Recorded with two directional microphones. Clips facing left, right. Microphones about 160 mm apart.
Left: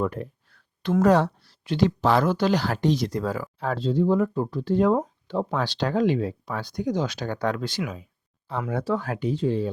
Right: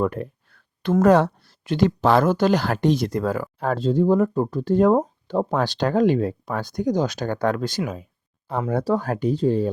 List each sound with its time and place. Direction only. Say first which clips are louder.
0.0 s speech: right 4 dB; 55° right (ahead or behind); by 9.6 s 40° right (ahead or behind)